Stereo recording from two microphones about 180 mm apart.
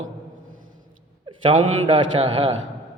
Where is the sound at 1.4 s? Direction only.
30° right (ahead or behind).